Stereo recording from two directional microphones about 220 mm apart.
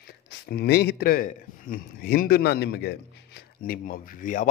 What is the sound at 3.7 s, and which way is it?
Speech, 35° left (ahead or behind).